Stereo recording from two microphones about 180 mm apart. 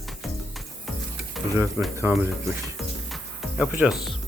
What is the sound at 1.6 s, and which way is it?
Speech, 10° right (ahead or behind).